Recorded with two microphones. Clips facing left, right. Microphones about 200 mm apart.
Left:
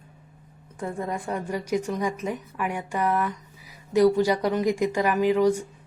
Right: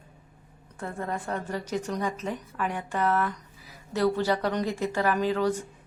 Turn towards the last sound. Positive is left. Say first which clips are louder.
# left 5 dB
turn(degrees=10)  # may be behind; listen again after turning